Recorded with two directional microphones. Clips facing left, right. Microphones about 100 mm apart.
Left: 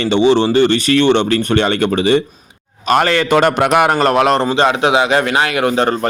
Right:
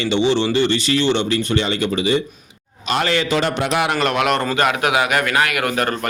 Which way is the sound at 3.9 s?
35° left (ahead or behind).